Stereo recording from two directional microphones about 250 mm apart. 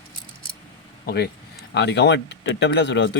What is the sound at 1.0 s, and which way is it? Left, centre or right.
Speech, left.